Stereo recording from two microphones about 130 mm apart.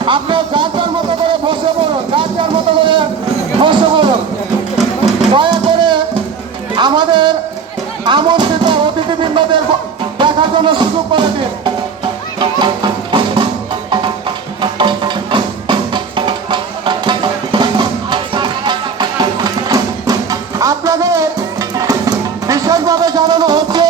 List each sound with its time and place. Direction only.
0.0 s speech: 40° right (ahead or behind)
2.1 s a sound: 40° right (ahead or behind)
3.6 s music: 40° right (ahead or behind)
5.3 s a sound: 40° right (ahead or behind)
8.0 s music: 35° right (ahead or behind)
14.6 s music: 35° right (ahead or behind)